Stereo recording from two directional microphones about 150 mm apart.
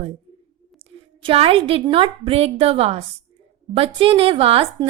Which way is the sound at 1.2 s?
35° right (ahead or behind).